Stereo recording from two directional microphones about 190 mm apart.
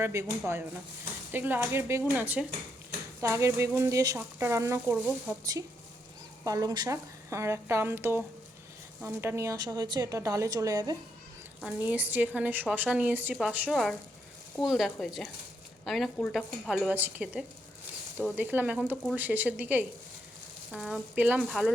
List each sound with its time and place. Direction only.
0.0 s a woman's voice: 15° right (ahead or behind)
6.4 s a woman's voice: 20° right (ahead or behind)
11.6 s a woman's voice: 10° right (ahead or behind)